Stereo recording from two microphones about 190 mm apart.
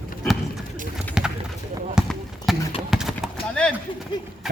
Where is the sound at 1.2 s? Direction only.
5° right (ahead or behind).